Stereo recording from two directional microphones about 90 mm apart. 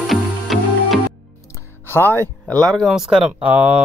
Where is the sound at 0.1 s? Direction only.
Centre (ahead or behind).